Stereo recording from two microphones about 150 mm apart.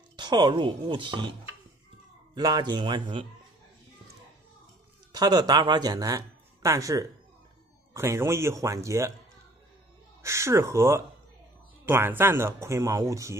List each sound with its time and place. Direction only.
0.1 s speech: 30° right (ahead or behind)
2.3 s speech: 30° right (ahead or behind)
5.1 s speech: 25° right (ahead or behind)
10.2 s speech: 20° right (ahead or behind)